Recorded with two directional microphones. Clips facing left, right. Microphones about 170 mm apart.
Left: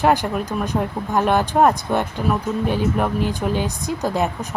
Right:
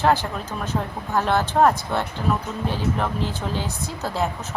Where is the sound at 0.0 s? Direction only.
15° left (ahead or behind).